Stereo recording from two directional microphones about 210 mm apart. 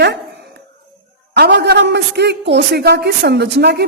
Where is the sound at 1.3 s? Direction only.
55° right (ahead or behind).